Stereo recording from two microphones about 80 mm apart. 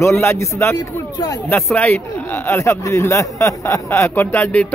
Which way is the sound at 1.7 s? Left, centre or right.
Left.